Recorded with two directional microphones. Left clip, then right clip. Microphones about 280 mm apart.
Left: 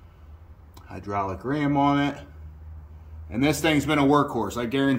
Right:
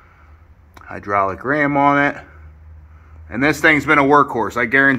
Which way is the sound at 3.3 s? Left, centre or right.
Right.